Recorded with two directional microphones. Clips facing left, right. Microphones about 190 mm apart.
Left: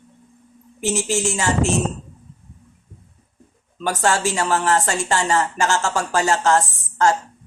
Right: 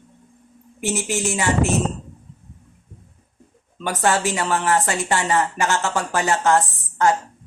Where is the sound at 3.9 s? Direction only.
20° right (ahead or behind).